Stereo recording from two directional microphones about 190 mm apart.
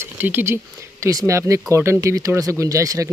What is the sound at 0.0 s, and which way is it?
Speech, 10° right (ahead or behind).